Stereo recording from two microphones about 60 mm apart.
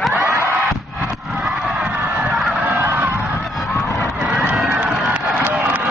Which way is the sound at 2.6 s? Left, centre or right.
Right.